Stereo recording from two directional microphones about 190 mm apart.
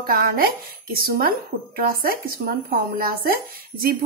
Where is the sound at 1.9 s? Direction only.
50° right (ahead or behind).